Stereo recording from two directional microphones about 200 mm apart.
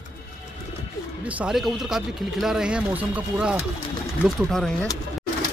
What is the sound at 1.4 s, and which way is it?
Speech, centre (ahead or behind).